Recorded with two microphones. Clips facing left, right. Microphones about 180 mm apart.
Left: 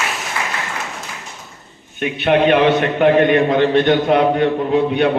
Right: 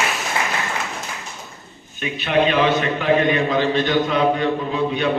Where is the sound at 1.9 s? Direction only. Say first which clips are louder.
Left 4 dB; 60° left (ahead or behind).